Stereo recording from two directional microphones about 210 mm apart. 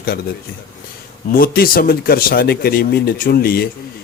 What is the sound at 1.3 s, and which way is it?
Speech, 45° left (ahead or behind).